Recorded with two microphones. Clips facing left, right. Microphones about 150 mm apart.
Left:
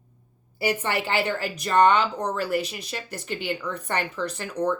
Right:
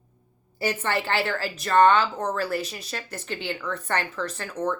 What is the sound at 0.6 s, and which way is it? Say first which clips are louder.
A woman's voice: left 1 dB; 15° left (ahead or behind).